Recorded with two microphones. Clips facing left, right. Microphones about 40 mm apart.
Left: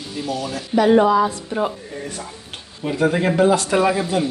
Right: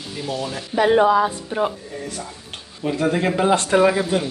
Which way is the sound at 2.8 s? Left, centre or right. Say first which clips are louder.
Left 1 dB; centre.